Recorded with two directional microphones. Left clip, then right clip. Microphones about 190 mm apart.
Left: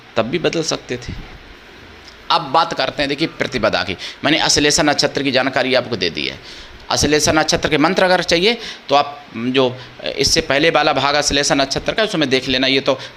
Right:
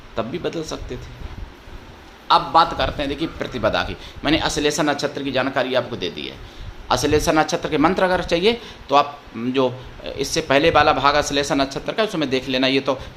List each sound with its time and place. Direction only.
0.2 s speech: 15° left (ahead or behind)
2.2 s speech: 25° left (ahead or behind); by 13.1 s 5° left (ahead or behind)